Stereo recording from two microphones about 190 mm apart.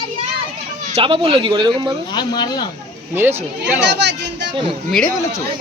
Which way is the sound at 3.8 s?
65° right (ahead or behind).